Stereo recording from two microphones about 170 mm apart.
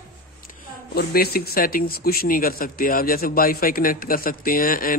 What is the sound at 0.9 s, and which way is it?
Speech, 65° left (ahead or behind).